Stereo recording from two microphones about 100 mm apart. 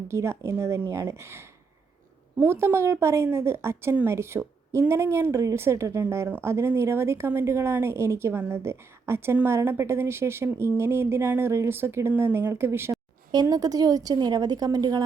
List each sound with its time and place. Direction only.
0.1 s a woman's voice: 25° right (ahead or behind)
13.3 s a woman's voice: 40° right (ahead or behind)